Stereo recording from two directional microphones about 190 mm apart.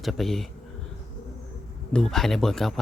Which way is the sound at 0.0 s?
Centre (ahead or behind).